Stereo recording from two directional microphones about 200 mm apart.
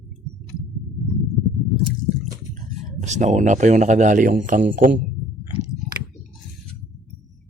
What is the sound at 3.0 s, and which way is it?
Speech, 35° right (ahead or behind).